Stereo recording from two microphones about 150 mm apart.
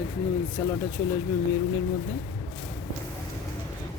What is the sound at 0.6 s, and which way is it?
Speech, 15° left (ahead or behind).